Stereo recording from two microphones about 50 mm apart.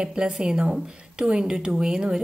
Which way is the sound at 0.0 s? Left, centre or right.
Centre.